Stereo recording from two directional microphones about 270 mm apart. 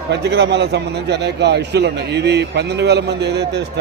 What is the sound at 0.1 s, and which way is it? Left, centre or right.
A man's voice, right.